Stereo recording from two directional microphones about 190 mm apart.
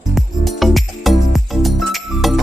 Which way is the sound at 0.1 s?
Centre (ahead or behind).